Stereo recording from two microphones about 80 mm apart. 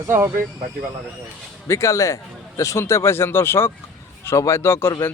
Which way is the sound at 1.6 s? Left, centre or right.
Left.